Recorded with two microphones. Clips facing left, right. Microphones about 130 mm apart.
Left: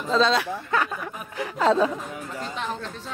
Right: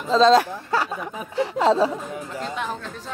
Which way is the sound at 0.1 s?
40° right (ahead or behind).